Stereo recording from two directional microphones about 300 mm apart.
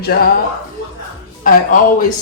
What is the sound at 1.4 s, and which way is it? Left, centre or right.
Speech, left.